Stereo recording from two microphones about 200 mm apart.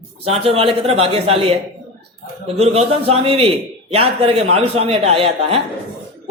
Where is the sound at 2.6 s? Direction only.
30° right (ahead or behind).